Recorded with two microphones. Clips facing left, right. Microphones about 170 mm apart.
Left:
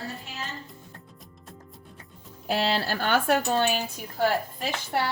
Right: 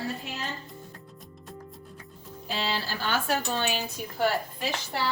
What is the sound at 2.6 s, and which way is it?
Speech, 60° left (ahead or behind).